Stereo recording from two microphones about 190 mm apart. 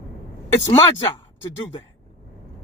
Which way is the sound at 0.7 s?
25° left (ahead or behind).